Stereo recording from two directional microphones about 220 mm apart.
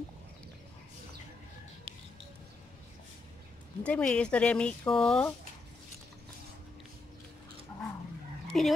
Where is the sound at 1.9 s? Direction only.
25° right (ahead or behind).